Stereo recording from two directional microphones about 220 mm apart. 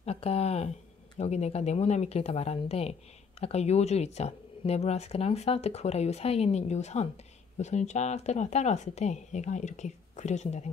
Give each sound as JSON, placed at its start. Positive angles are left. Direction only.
{"t": 0.0, "sound": "speech", "side_deg": 30}